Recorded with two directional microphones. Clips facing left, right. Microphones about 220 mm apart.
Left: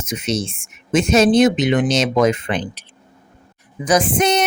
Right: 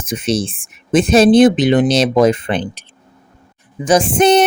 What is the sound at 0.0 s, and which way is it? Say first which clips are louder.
Speech: right 4 dB; 30° right (ahead or behind).